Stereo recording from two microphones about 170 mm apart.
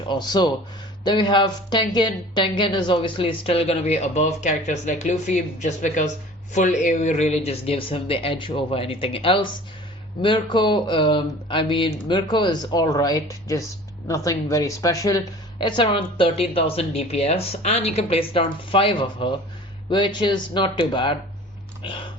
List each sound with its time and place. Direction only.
0.1 s a man's voice: 25° left (ahead or behind)